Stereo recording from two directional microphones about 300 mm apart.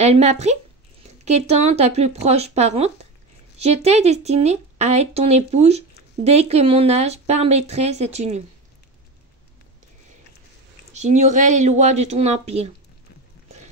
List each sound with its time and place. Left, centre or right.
0.0 s speech: right
10.9 s speech: right